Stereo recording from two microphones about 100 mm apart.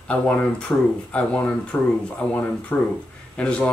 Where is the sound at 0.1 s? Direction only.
10° left (ahead or behind).